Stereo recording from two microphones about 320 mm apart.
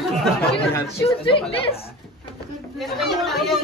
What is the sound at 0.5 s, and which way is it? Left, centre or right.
Speech, centre.